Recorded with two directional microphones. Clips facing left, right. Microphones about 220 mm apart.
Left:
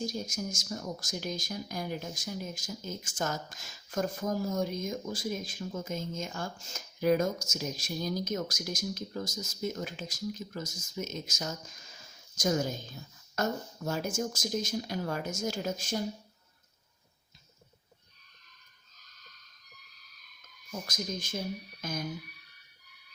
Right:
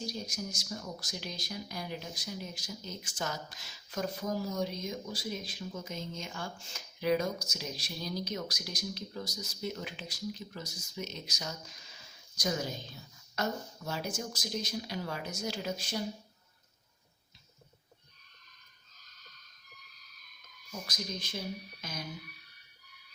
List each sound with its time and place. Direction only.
0.0 s speech: 45° left (ahead or behind)
20.8 s speech: 45° left (ahead or behind)
21.8 s music: 50° left (ahead or behind)